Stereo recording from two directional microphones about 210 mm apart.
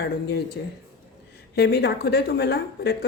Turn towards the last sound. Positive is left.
turn(degrees=50)  # may be behind; listen again after turning